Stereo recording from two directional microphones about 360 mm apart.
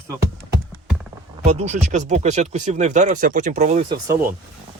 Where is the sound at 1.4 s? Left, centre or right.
Centre.